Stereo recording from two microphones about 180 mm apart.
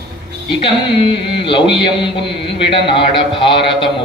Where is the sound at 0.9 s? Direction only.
30° left (ahead or behind).